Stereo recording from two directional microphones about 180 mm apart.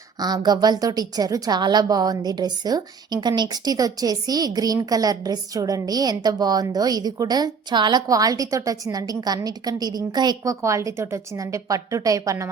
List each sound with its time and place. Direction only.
0.2 s a woman's voice: 20° right (ahead or behind)